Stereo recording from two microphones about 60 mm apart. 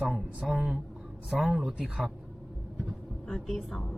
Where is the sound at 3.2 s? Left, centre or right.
Centre.